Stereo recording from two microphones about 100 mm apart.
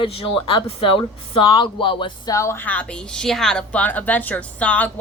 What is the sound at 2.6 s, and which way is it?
A woman's voice, 15° left (ahead or behind).